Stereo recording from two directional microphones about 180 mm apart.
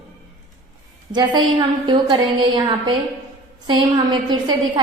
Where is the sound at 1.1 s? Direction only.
25° right (ahead or behind).